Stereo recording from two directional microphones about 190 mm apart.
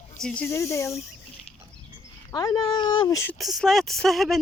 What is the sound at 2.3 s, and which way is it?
Speech, 20° left (ahead or behind).